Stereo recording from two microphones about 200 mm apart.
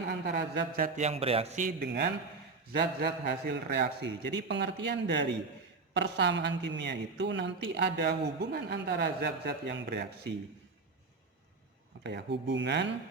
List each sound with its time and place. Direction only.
0.1 s a man's voice: 55° right (ahead or behind)
1.0 s a man's voice: 30° right (ahead or behind)
2.7 s a woman's voice: 55° right (ahead or behind)
12.0 s a woman's voice: 60° right (ahead or behind)